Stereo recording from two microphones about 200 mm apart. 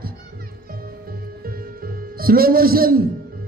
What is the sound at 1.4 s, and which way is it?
Music, 45° right (ahead or behind).